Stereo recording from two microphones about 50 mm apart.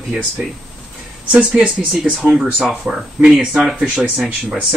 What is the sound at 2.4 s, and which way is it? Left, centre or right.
Speech, centre.